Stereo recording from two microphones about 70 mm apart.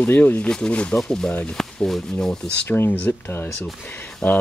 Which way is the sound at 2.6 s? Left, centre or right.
Left.